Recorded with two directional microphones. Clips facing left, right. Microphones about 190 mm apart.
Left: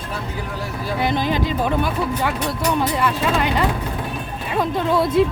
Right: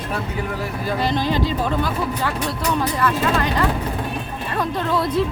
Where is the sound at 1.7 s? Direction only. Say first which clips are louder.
Left 1 dB; 15° left (ahead or behind).